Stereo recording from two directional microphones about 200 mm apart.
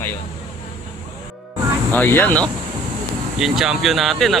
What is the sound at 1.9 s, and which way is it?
Speech, 10° left (ahead or behind).